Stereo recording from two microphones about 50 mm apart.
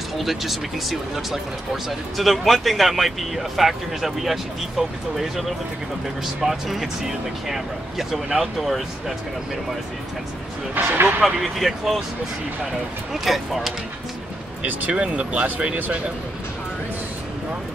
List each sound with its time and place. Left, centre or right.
0.2 s speech: centre
6.4 s speech: centre
10.8 s speech: right
11.2 s speech: centre
13.1 s speech: centre
14.6 s speech: right